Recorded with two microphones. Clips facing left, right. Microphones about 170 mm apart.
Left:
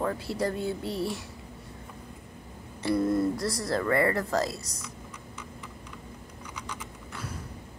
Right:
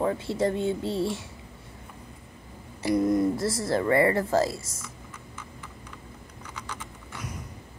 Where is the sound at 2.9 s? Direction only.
20° right (ahead or behind).